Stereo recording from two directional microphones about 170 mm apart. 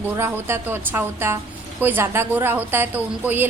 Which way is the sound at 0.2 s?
15° right (ahead or behind).